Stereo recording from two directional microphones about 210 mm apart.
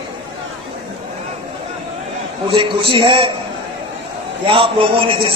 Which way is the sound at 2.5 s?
25° right (ahead or behind).